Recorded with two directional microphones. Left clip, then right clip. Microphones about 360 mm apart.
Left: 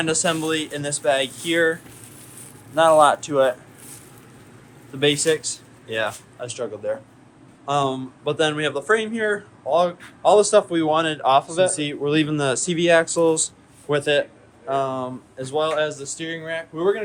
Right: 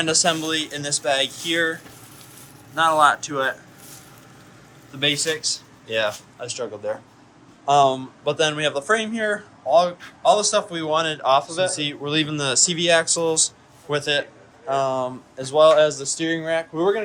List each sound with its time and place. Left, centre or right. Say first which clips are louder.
0.0 s speech: right 1 dB; centre
4.9 s speech: left 3 dB; centre